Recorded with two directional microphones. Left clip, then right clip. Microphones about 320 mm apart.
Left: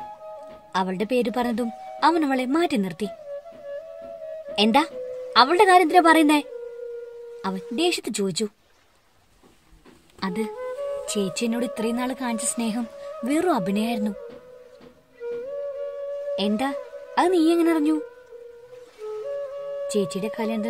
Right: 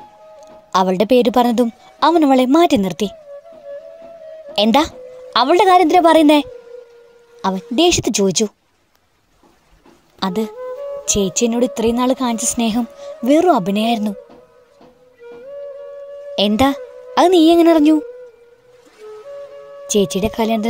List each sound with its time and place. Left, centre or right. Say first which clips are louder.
0.7 s a woman's voice: right 11 dB; right
4.6 s a woman's voice: right 6 dB; right
7.4 s a woman's voice: right 10 dB; right
10.2 s a woman's voice: right 7 dB; centre
16.3 s a woman's voice: right 13 dB; right
19.9 s a woman's voice: right 11 dB; right